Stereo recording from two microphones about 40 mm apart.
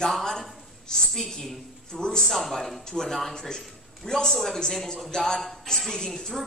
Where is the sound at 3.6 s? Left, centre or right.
Centre.